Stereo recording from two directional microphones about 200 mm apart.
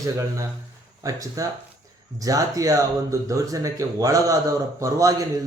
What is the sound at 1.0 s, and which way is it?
Speech, 15° right (ahead or behind).